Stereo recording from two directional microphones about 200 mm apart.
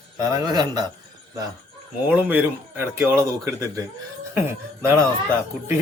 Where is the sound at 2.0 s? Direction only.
10° right (ahead or behind).